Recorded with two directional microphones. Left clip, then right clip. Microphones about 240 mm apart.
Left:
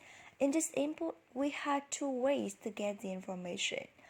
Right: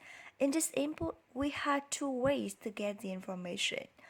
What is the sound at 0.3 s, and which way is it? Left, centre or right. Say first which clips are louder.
A woman's voice: even; centre.